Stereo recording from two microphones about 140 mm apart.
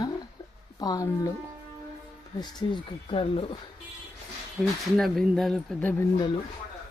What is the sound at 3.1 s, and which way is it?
Speech, 40° left (ahead or behind).